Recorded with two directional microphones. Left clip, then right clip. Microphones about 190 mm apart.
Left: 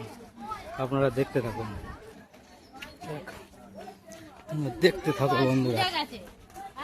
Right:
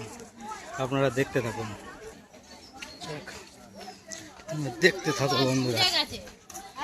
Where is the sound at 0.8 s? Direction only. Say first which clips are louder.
Even; centre (ahead or behind).